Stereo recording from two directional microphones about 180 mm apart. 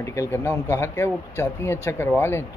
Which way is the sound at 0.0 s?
15° left (ahead or behind).